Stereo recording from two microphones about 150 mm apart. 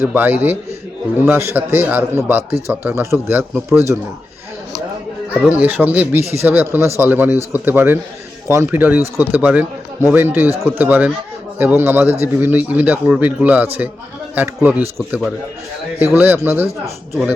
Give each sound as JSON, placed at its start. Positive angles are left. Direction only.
{"t": 0.0, "sound": "speech", "side_deg": -10}
{"t": 5.5, "sound": "speech", "side_deg": -10}
{"t": 16.0, "sound": "speech", "side_deg": -15}